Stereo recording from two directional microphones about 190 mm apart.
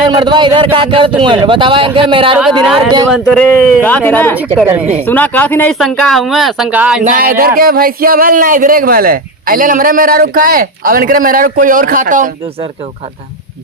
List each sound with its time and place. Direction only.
0.1 s a man's voice: 25° right (ahead or behind)
2.4 s speech: centre (ahead or behind)
4.4 s a woman's voice: 10° right (ahead or behind)
5.0 s speech: 10° left (ahead or behind)
7.0 s speech: 45° right (ahead or behind)